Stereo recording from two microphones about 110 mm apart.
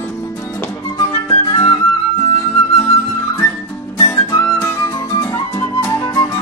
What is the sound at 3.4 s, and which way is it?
Music, 20° left (ahead or behind).